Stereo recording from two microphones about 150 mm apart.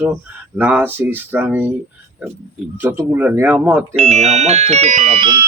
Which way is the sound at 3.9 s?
45° right (ahead or behind).